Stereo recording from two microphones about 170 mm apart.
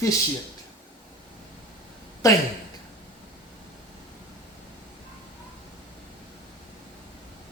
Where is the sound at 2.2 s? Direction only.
20° left (ahead or behind).